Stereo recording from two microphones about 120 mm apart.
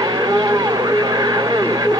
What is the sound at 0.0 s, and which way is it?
Vehicle, 35° right (ahead or behind).